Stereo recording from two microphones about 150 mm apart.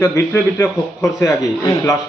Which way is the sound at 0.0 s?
10° left (ahead or behind).